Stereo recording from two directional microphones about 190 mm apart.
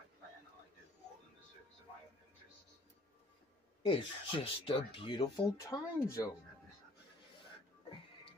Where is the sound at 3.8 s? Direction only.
30° left (ahead or behind).